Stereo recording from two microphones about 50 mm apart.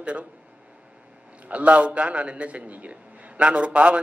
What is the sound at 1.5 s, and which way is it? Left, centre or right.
A man's voice, right.